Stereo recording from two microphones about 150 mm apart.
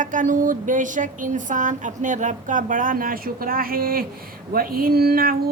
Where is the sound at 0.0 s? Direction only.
60° right (ahead or behind).